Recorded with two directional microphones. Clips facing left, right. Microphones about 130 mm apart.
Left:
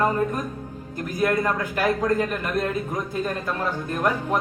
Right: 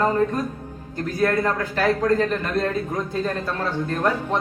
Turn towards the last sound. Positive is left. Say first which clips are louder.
# right 1 dB
turn(degrees=15)  # may be behind; listen again after turning